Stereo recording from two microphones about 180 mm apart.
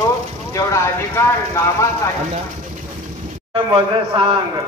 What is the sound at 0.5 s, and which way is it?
Speech, 15° left (ahead or behind).